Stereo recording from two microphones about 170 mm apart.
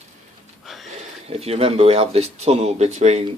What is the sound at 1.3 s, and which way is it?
Speech, 35° right (ahead or behind).